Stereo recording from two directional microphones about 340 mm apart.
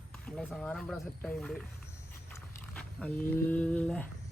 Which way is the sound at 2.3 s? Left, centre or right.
Centre.